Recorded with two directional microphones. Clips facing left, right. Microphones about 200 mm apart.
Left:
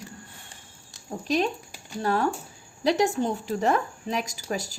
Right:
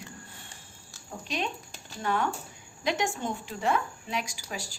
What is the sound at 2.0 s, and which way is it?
A woman's voice, 35° left (ahead or behind).